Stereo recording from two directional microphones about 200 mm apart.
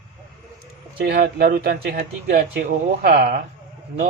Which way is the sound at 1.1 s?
50° right (ahead or behind).